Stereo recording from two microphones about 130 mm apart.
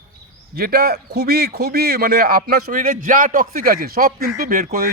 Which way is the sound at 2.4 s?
90° right.